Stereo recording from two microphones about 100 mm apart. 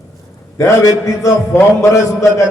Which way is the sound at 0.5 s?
35° left (ahead or behind).